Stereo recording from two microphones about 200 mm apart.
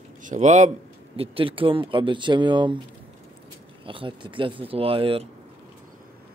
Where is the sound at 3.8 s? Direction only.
25° right (ahead or behind).